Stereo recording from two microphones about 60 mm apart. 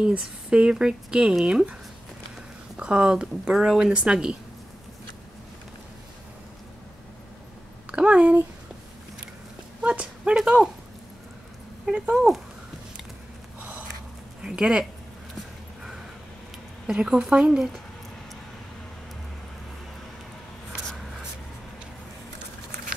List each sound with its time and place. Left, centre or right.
0.2 s speech: centre
2.8 s speech: centre
7.9 s speech: right
9.8 s a sound: centre
10.3 s speech: centre
12.1 s speech: centre
13.6 s a sound: right
14.4 s speech: centre
16.8 s a woman's voice: centre